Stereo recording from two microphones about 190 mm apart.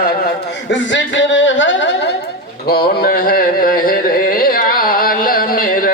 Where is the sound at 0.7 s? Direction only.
75° left (ahead or behind).